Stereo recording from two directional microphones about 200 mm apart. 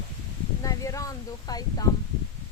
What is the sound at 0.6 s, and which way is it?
Speech, 15° left (ahead or behind).